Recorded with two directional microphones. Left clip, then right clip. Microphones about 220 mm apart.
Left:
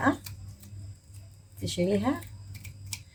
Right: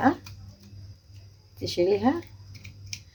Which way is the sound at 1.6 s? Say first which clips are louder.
Right 5 dB; 25° right (ahead or behind).